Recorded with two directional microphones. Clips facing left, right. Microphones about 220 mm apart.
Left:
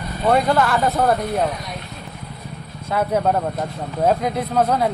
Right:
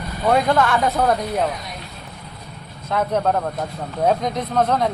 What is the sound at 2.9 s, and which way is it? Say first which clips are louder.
Speech: left 1 dB; 5° left (ahead or behind).